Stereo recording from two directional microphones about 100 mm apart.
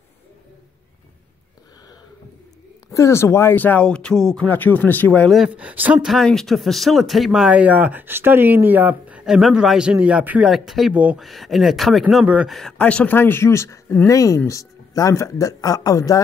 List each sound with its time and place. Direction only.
2.9 s speech: 30° left (ahead or behind); by 4.5 s 5° left (ahead or behind)
4.5 s speech: 15° left (ahead or behind)
5.5 s speech: 15° right (ahead or behind)
6.0 s speech: 5° left (ahead or behind); by 10.5 s 15° right (ahead or behind)
10.5 s speech: centre (ahead or behind)
10.9 s speech: 15° right (ahead or behind)
11.1 s speech: centre (ahead or behind)
12.7 s speech: 15° left (ahead or behind); by 16.2 s 35° left (ahead or behind)